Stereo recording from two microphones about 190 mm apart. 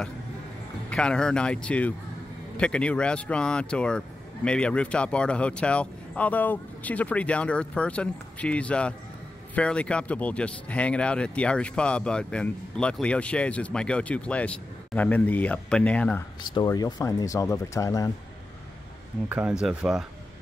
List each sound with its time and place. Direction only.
0.8 s speech: 5° left (ahead or behind)
16.5 s speech: 20° left (ahead or behind)
19.2 s speech: 10° right (ahead or behind)